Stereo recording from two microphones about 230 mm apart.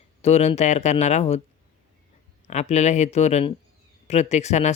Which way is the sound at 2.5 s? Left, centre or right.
Left.